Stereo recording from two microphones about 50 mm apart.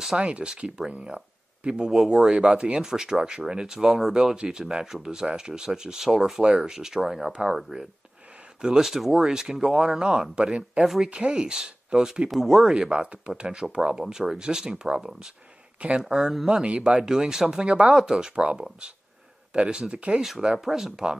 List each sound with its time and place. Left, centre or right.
0.2 s speech: right
1.9 s speech: centre
16.6 s speech: right
20.5 s speech: centre